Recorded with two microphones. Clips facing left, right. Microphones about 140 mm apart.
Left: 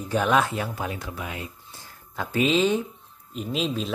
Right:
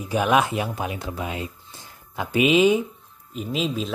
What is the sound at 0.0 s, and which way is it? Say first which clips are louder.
Speech: right 2 dB; 10° right (ahead or behind).